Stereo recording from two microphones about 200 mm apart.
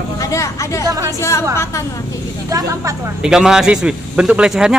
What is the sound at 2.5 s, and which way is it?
Speech, 15° right (ahead or behind).